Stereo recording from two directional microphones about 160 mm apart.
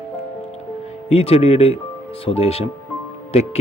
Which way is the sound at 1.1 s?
40° left (ahead or behind).